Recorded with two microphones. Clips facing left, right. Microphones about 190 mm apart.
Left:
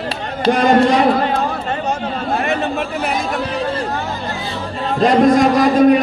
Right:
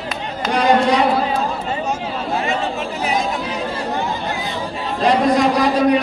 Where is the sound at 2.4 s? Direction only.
60° left (ahead or behind).